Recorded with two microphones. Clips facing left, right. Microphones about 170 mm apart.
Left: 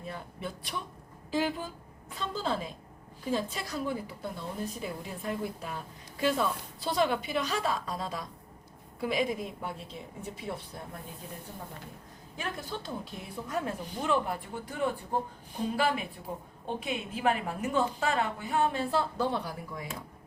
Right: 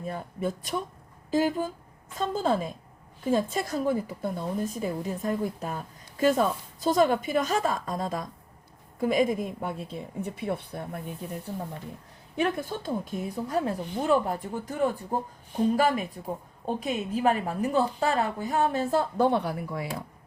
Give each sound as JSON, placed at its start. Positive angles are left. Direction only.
{"t": 0.0, "sound": "a woman's voice", "side_deg": -45}
{"t": 12.4, "sound": "a woman's voice", "side_deg": -50}